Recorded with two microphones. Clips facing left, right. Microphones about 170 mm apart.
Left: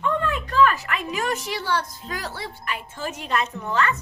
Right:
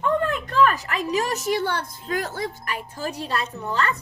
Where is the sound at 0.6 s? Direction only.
40° right (ahead or behind).